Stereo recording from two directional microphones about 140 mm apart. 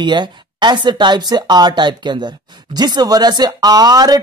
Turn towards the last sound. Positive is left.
turn(degrees=-25)  # may be behind; listen again after turning